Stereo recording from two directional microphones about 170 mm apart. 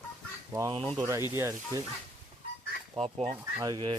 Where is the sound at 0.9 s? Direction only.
15° right (ahead or behind).